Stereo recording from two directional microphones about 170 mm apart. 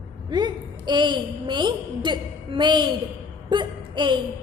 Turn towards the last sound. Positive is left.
turn(degrees=-25)  # may be behind; listen again after turning